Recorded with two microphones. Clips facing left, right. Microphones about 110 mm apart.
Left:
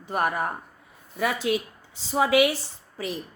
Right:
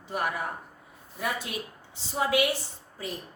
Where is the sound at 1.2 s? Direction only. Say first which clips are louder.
Left 7 dB; 90° left.